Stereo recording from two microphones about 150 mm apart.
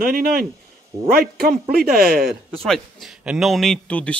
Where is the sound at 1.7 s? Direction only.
90° right.